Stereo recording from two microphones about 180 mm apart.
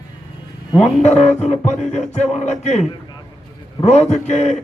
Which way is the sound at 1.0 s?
40° left (ahead or behind).